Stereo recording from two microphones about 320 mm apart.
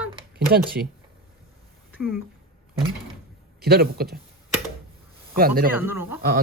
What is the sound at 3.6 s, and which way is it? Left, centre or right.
Speech, right.